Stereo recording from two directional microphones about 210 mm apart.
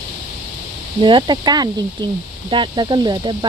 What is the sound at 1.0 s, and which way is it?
Speech, 20° right (ahead or behind).